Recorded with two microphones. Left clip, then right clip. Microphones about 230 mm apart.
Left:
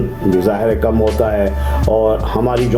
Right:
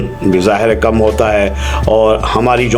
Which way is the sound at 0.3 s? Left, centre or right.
Centre.